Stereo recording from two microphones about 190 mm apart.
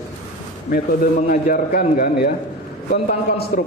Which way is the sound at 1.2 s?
50° left (ahead or behind).